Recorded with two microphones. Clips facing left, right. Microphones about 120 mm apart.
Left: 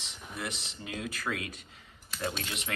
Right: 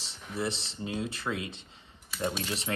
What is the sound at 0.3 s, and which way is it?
Speech, 30° right (ahead or behind).